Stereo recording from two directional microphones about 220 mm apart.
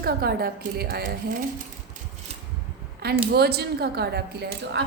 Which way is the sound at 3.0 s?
45° right (ahead or behind).